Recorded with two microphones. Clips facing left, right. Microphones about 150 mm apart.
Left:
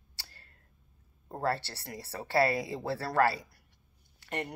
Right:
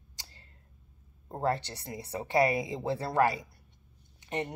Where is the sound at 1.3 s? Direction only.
20° right (ahead or behind).